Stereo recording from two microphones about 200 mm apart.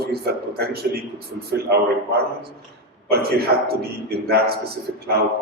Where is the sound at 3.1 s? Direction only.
50° right (ahead or behind).